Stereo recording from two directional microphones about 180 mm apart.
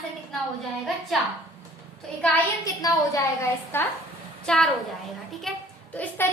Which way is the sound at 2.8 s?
20° left (ahead or behind).